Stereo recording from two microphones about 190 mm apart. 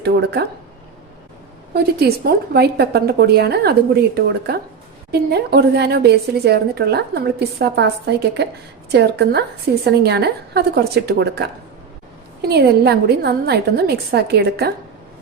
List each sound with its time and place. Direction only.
0.0 s a woman's voice: 60° right (ahead or behind)
1.7 s a woman's voice: 55° right (ahead or behind)